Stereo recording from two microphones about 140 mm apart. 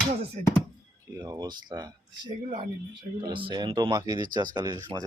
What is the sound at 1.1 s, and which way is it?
Speech, 25° right (ahead or behind).